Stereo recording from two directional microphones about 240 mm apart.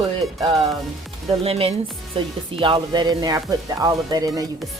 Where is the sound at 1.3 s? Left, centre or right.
Right.